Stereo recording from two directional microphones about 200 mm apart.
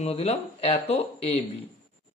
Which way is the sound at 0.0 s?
30° left (ahead or behind).